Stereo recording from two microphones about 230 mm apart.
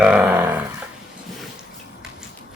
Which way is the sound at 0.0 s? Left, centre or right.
Centre.